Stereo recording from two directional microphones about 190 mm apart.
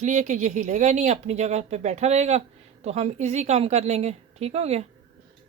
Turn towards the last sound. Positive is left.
turn(degrees=-35)  # may be behind; listen again after turning